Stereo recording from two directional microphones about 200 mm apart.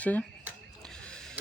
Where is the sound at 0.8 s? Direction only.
5° left (ahead or behind).